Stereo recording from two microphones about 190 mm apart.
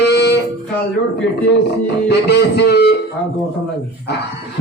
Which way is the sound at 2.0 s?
60° left (ahead or behind).